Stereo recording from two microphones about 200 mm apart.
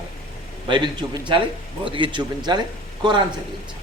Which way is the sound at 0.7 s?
25° right (ahead or behind).